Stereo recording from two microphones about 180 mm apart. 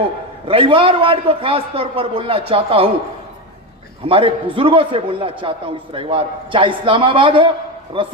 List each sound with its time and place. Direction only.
0.4 s a man's voice: 30° right (ahead or behind)
4.1 s a man's voice: 30° right (ahead or behind)